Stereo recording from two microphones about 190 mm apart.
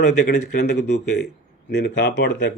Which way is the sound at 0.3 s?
60° left (ahead or behind).